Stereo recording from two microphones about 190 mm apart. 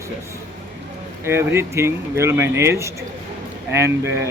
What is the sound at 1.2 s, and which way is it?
Speech, 15° right (ahead or behind).